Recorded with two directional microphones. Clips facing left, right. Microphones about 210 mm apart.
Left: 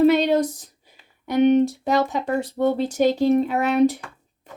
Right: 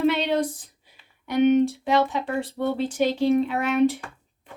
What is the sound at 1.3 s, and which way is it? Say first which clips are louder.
Speech: left 2 dB; 40° left (ahead or behind).